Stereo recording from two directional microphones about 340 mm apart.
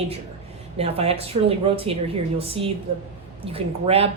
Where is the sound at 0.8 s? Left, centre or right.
Centre.